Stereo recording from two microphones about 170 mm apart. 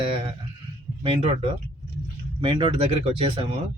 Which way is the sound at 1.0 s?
35° right (ahead or behind).